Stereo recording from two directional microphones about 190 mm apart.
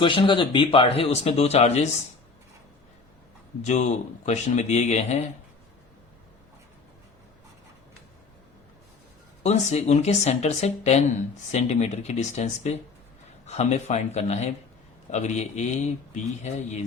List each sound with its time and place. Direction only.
0.0 s speech: 25° left (ahead or behind)
3.6 s speech: 35° left (ahead or behind)
9.4 s speech: 35° left (ahead or behind)